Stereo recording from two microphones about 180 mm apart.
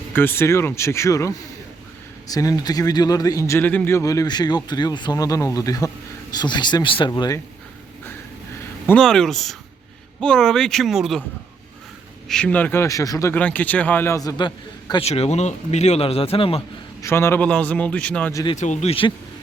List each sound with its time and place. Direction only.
0.1 s a man's voice: 10° left (ahead or behind)
8.9 s speech: 5° left (ahead or behind)
12.3 s speech: 5° left (ahead or behind); by 16.6 s 30° left (ahead or behind)
17.0 s a man's voice: 15° left (ahead or behind)
18.5 s a man's voice: 40° left (ahead or behind)